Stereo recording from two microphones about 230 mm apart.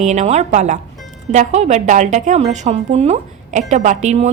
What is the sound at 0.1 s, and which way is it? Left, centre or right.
A woman's voice, right.